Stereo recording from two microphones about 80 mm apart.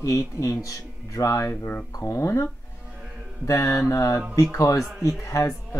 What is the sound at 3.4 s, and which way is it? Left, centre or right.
A man's voice, left.